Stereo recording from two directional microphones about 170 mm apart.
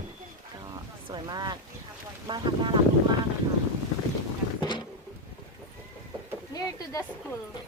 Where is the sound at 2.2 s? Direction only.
25° right (ahead or behind).